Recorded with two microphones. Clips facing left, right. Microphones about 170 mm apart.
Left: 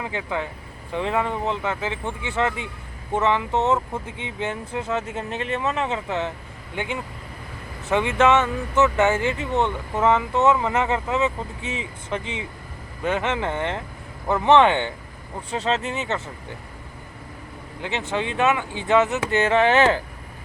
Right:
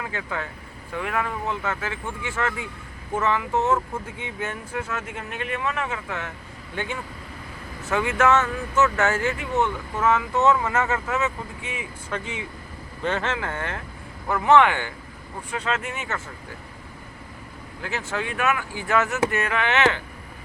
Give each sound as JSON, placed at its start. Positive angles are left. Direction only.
{"t": 0.0, "sound": "speech", "side_deg": 20}
{"t": 13.0, "sound": "speech", "side_deg": 10}
{"t": 18.1, "sound": "speech", "side_deg": 25}